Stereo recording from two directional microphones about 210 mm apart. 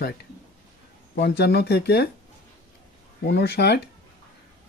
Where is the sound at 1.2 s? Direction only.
50° left (ahead or behind).